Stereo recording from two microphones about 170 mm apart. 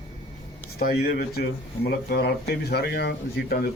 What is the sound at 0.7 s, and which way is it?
A man's voice, 65° left (ahead or behind).